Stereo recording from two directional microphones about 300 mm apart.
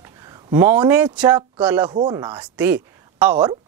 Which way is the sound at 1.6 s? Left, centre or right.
Centre.